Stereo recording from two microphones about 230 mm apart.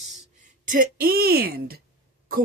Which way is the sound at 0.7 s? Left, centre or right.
Right.